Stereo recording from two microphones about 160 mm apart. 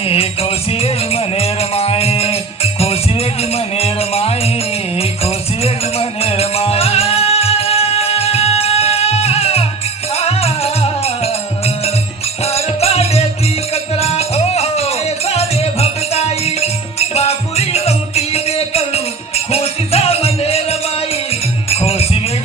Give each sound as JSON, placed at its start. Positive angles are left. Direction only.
{"t": 0.8, "sound": "music", "side_deg": 40}
{"t": 3.8, "sound": "music", "side_deg": 40}
{"t": 12.5, "sound": "music", "side_deg": 40}